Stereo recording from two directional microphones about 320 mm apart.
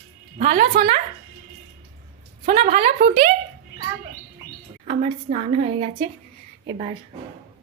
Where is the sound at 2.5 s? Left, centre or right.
Centre.